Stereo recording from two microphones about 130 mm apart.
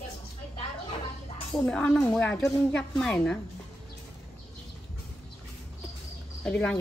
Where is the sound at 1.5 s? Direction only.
5° left (ahead or behind).